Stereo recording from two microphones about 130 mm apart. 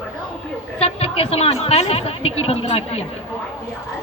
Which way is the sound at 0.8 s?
50° left (ahead or behind).